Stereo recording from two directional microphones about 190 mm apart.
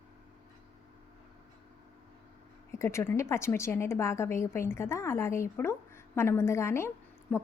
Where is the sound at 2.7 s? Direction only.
15° left (ahead or behind).